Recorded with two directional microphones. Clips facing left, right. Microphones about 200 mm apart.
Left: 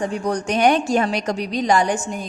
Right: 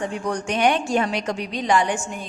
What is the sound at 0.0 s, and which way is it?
A woman's voice, 40° left (ahead or behind).